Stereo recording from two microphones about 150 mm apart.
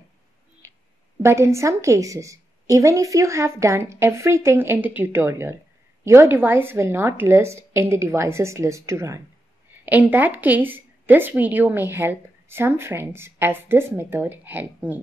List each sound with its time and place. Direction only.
1.2 s a woman's voice: 20° right (ahead or behind)